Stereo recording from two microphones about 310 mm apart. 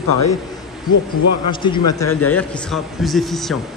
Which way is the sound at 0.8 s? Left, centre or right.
Left.